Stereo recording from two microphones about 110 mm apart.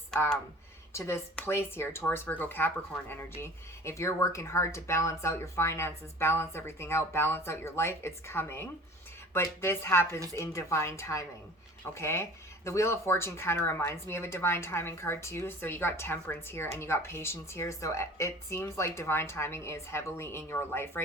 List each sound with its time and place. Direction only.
0.9 s speech: 25° left (ahead or behind)